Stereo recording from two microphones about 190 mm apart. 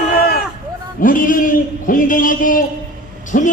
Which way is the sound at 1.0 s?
45° left (ahead or behind).